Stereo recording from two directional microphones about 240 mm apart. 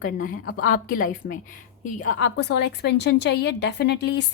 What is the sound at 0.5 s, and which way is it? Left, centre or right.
A woman's voice, left.